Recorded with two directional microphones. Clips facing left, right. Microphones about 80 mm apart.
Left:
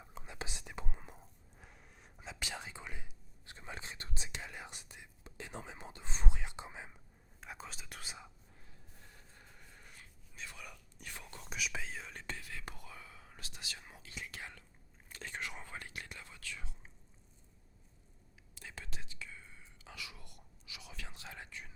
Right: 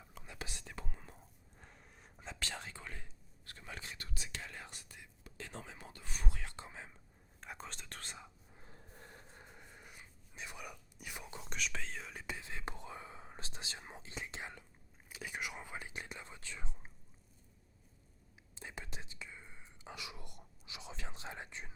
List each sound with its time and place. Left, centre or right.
0.1 s whispering: left
1.5 s whispering: centre
7.4 s whispering: centre
8.6 s a sound: right
9.3 s whispering: right
11.4 s whispering: centre
12.4 s whispering: right
15.1 s whispering: centre
18.5 s whispering: right